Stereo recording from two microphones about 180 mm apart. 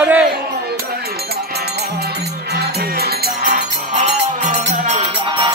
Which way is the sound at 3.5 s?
40° right (ahead or behind).